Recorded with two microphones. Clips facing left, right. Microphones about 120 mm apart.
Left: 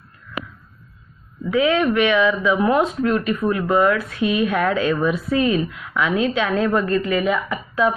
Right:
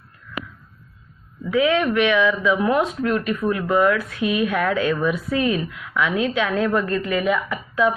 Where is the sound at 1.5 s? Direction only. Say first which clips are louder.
Left 1 dB; 25° left (ahead or behind).